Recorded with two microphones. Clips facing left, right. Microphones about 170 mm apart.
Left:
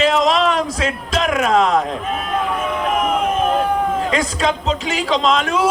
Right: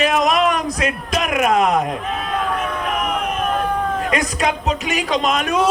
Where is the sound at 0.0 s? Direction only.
25° left (ahead or behind).